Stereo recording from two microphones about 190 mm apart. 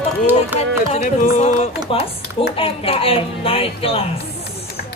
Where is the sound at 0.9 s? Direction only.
40° left (ahead or behind).